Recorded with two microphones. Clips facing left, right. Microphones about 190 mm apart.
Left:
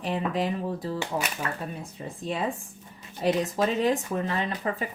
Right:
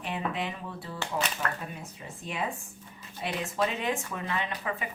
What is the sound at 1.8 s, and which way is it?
Speech, 35° left (ahead or behind).